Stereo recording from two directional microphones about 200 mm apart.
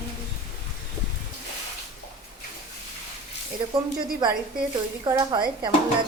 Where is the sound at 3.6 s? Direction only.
25° right (ahead or behind).